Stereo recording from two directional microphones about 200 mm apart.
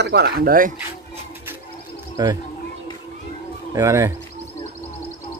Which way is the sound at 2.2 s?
20° right (ahead or behind).